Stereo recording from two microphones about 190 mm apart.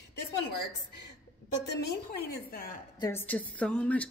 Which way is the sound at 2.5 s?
50° left (ahead or behind).